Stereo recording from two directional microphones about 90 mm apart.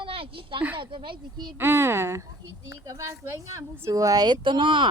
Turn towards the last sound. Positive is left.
turn(degrees=-65)  # may be behind; listen again after turning